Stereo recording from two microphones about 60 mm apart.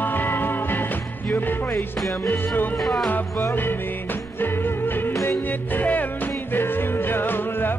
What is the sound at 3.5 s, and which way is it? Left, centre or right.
Music, left.